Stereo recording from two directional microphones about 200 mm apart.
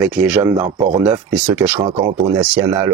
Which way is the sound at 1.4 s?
5° right (ahead or behind).